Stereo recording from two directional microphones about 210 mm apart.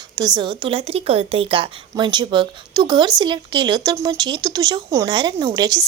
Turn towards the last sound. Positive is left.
turn(degrees=-20)  # may be behind; listen again after turning